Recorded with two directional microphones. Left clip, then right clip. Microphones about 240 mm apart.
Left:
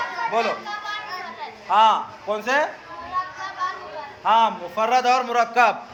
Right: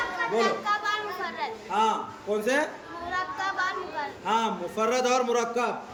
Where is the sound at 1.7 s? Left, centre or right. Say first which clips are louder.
Left 9 dB; centre.